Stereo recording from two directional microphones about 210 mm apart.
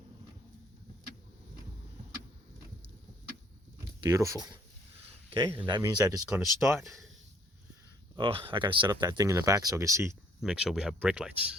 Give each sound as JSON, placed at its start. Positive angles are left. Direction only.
{"t": 4.0, "sound": "speech", "side_deg": -15}
{"t": 8.1, "sound": "speech", "side_deg": -25}
{"t": 10.4, "sound": "speech", "side_deg": -5}